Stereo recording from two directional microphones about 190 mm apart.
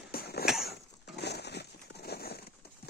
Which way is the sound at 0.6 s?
60° left (ahead or behind).